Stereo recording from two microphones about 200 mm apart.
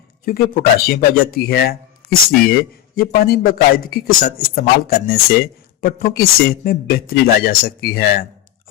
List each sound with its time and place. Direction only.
0.3 s speech: 45° left (ahead or behind)